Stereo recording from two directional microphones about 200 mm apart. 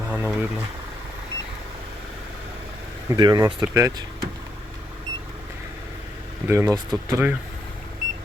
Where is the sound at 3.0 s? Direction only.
20° right (ahead or behind).